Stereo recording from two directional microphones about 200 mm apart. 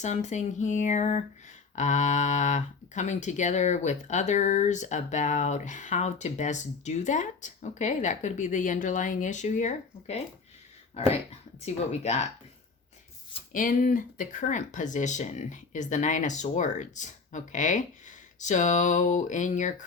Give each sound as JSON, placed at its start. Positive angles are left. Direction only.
{"t": 0.0, "sound": "speech", "side_deg": 35}
{"t": 13.5, "sound": "speech", "side_deg": 45}